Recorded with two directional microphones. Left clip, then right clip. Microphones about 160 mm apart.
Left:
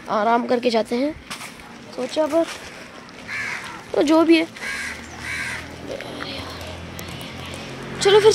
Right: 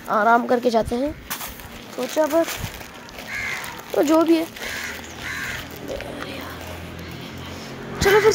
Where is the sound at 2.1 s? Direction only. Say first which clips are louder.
Right 1 dB; centre (ahead or behind).